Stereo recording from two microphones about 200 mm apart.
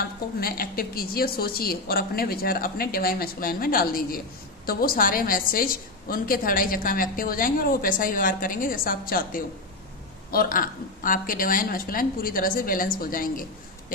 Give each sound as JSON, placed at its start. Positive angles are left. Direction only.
{"t": 0.3, "sound": "a woman's voice", "side_deg": 50}